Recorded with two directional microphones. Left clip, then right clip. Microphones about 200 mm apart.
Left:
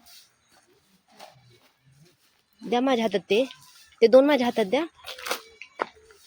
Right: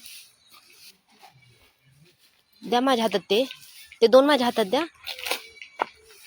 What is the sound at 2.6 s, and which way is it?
Speech, 5° left (ahead or behind).